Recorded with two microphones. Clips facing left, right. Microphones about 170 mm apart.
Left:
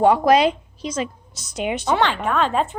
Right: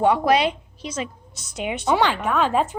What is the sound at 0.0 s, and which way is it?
Speech, 40° left (ahead or behind).